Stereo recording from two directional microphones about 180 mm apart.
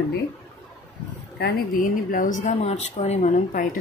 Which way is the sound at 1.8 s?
50° left (ahead or behind).